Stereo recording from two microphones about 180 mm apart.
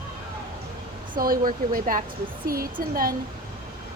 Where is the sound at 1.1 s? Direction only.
50° right (ahead or behind).